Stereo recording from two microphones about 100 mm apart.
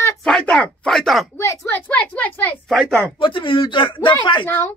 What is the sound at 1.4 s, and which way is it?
Speech, 30° left (ahead or behind).